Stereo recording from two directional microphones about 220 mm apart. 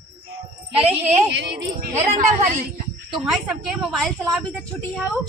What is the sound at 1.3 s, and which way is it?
Speech, 55° right (ahead or behind).